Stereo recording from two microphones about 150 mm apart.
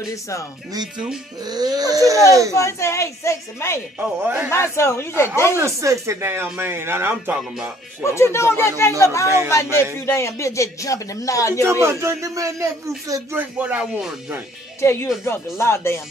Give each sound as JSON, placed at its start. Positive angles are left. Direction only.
{"t": 0.1, "sound": "speech", "side_deg": 20}
{"t": 0.9, "sound": "speech", "side_deg": -5}
{"t": 1.4, "sound": "speech", "side_deg": -25}
{"t": 2.5, "sound": "speech", "side_deg": 20}
{"t": 4.0, "sound": "speech", "side_deg": -10}
{"t": 4.5, "sound": "speech", "side_deg": 20}
{"t": 5.6, "sound": "speech", "side_deg": -20}
{"t": 8.0, "sound": "speech", "side_deg": 20}
{"t": 11.6, "sound": "speech", "side_deg": -20}
{"t": 14.8, "sound": "speech", "side_deg": 15}